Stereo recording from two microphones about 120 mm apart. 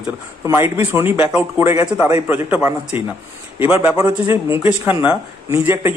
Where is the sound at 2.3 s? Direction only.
15° right (ahead or behind).